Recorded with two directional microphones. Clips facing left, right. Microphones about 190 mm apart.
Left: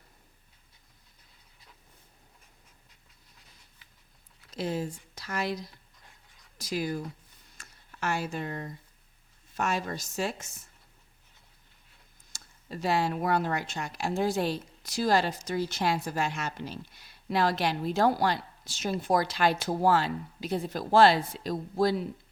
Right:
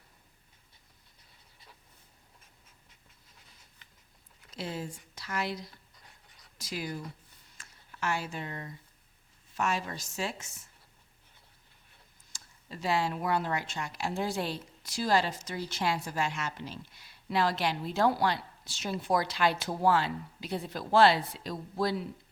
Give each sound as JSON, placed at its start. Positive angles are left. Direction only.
{"t": 4.5, "sound": "speech", "side_deg": 45}
{"t": 6.6, "sound": "speech", "side_deg": 45}
{"t": 7.6, "sound": "a sound", "side_deg": 40}
{"t": 9.6, "sound": "a woman's voice", "side_deg": 45}
{"t": 12.3, "sound": "speech", "side_deg": 45}